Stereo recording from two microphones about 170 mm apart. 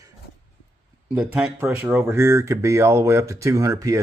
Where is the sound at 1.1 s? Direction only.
5° right (ahead or behind).